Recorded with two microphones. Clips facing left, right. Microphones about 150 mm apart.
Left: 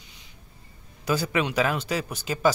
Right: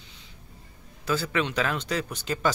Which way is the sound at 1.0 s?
10° left (ahead or behind).